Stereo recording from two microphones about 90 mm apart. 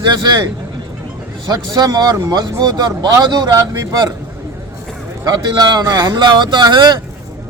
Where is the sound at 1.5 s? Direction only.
45° right (ahead or behind).